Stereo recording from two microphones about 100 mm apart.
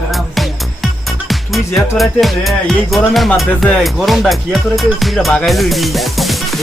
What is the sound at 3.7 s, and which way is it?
Speech, centre (ahead or behind).